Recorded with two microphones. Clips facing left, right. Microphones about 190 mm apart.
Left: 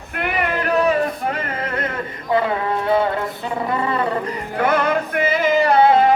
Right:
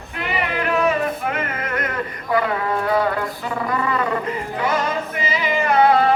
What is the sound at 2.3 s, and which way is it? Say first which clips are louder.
Speech: left 2 dB; 25° left (ahead or behind).